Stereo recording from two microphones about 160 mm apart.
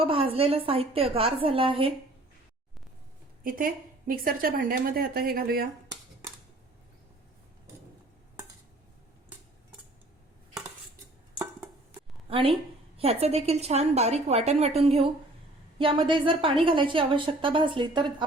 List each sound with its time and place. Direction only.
0.0 s a woman's voice: 35° right (ahead or behind)
3.4 s a woman's voice: 60° right (ahead or behind)
11.9 s a sound: 35° right (ahead or behind)
13.0 s a woman's voice: 40° right (ahead or behind)